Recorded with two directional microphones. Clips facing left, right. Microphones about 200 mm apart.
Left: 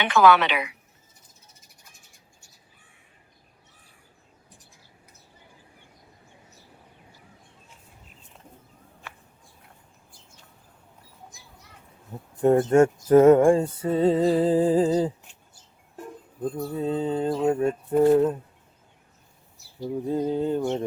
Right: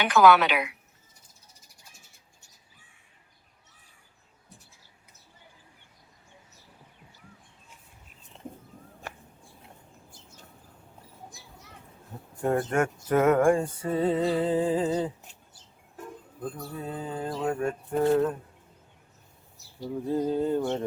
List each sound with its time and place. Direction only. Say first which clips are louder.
0.0 s a woman's voice: left 1 dB; centre (ahead or behind)
9.1 s a sound: right 4 dB; 45° right (ahead or behind)
12.4 s music: left 8 dB; 25° left (ahead or behind)
16.7 s music: left 11 dB; 25° left (ahead or behind)
20.1 s music: left 1 dB; 20° left (ahead or behind)
20.6 s mantra: left 2 dB; 10° left (ahead or behind)